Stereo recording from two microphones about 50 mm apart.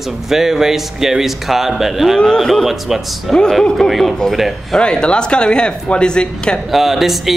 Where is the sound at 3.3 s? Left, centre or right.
Centre.